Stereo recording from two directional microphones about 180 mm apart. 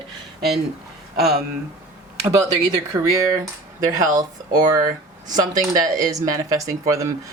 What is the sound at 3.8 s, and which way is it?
Speech, 20° right (ahead or behind).